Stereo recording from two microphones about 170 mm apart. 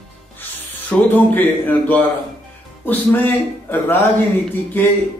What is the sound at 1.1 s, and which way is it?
A man's voice, 10° left (ahead or behind).